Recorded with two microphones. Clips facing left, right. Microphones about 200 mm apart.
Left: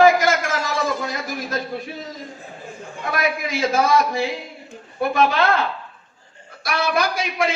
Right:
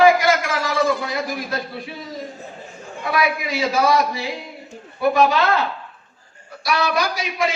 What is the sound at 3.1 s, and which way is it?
A man's voice, 50° left (ahead or behind).